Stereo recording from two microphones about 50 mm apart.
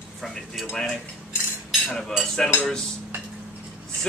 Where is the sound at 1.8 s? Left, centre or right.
Centre.